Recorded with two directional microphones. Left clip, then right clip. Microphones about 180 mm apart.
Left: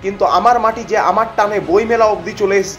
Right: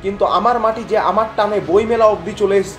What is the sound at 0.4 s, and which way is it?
Speech, 35° left (ahead or behind).